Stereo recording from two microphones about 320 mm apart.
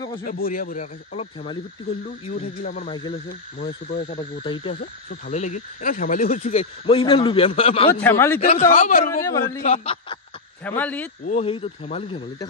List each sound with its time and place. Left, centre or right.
0.2 s speech: left
8.0 s speech: centre
8.4 s speech: left
10.6 s speech: centre
11.2 s speech: centre